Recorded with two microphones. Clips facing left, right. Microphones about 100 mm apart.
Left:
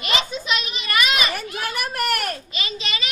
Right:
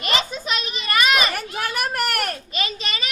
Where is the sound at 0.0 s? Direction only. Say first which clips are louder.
Right 1 dB; 40° right (ahead or behind).